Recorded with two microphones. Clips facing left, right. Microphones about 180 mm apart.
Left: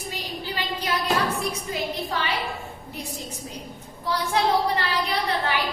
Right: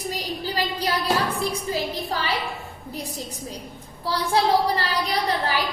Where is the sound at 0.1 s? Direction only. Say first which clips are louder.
Right 1 dB; 35° right (ahead or behind).